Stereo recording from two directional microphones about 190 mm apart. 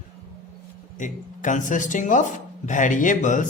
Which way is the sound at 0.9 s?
40° left (ahead or behind).